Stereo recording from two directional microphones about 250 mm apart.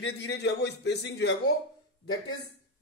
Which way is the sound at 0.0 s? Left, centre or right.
Left.